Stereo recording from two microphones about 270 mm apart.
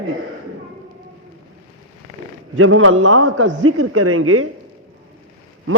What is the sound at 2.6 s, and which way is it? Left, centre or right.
A man's voice, right.